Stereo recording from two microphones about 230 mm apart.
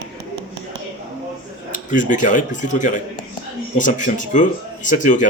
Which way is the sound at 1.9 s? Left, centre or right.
Left.